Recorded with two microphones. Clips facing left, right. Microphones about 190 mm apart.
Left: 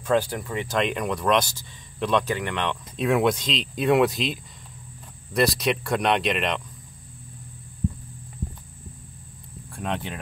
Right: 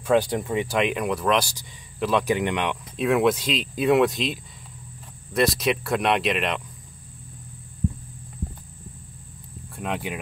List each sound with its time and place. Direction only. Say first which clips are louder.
0.0 s speech: right 2 dB; 15° right (ahead or behind)
0.7 s speech: left 2 dB; 5° right (ahead or behind)
2.2 s speech: right 3 dB; 15° right (ahead or behind)
3.0 s speech: right 1 dB; centre (ahead or behind)
9.8 s speech: right 1 dB; 5° right (ahead or behind)